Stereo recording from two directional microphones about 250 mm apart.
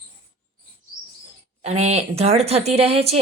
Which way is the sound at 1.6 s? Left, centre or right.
Right.